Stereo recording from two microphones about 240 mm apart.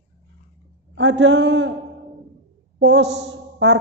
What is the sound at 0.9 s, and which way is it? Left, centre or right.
Speech, right.